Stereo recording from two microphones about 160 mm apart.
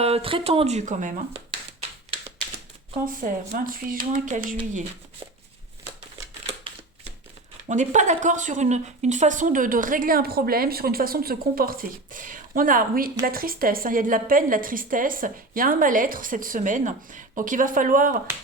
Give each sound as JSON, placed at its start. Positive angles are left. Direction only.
{"t": 0.0, "sound": "speech", "side_deg": -35}
{"t": 3.2, "sound": "speech", "side_deg": -60}
{"t": 7.7, "sound": "speech", "side_deg": -50}